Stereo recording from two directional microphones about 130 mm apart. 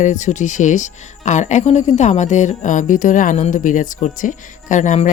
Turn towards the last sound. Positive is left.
turn(degrees=65)  # may be behind; listen again after turning